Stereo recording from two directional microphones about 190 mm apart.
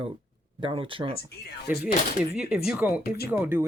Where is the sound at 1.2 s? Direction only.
60° left (ahead or behind).